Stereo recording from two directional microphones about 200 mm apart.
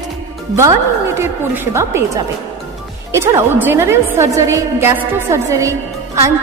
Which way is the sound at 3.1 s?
15° right (ahead or behind).